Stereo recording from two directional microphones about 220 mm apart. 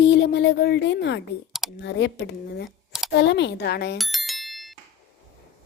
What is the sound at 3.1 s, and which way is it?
Speech, 50° left (ahead or behind).